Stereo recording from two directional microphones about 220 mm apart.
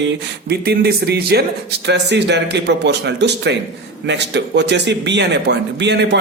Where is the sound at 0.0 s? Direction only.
45° right (ahead or behind).